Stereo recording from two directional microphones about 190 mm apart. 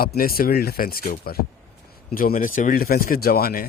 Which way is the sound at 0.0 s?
50° left (ahead or behind).